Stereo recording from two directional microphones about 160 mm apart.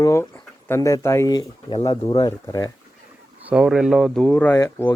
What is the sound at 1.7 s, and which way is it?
Speech, 35° left (ahead or behind).